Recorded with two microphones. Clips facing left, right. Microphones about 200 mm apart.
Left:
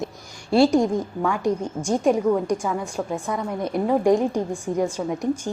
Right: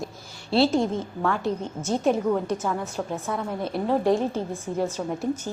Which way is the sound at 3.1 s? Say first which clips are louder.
Left 3 dB; 5° right (ahead or behind).